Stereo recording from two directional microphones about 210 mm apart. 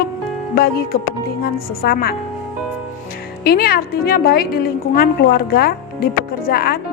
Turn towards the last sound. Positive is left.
turn(degrees=45)  # may be behind; listen again after turning